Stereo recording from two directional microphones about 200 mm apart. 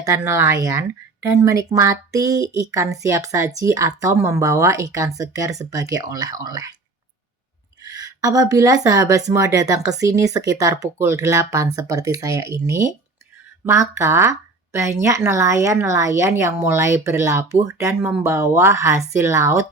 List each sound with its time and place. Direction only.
0.0 s speech: 15° right (ahead or behind)
7.9 s speech: 20° right (ahead or behind)